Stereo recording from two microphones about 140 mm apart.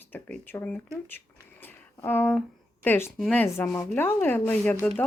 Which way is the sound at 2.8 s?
15° left (ahead or behind).